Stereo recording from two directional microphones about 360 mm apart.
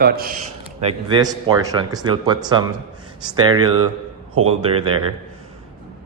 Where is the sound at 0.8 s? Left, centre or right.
Centre.